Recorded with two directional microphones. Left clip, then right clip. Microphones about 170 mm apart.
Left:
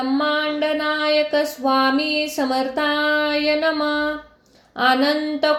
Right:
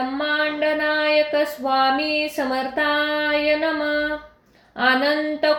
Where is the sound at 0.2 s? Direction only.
35° left (ahead or behind).